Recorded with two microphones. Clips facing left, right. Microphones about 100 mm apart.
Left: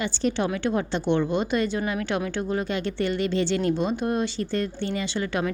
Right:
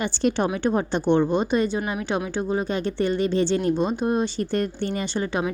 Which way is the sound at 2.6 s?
40° right (ahead or behind).